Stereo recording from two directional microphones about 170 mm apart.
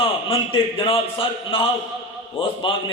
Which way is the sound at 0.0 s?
30° left (ahead or behind).